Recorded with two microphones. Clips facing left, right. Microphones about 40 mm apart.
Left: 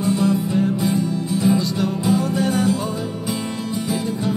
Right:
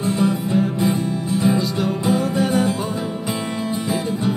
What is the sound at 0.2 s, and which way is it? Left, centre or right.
Music, right.